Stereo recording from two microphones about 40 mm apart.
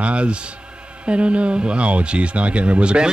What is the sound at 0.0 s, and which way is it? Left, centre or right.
Speech, right.